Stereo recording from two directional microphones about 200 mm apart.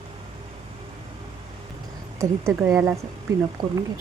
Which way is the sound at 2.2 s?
15° right (ahead or behind).